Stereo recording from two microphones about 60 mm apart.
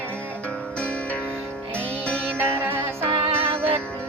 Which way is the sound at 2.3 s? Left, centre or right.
Right.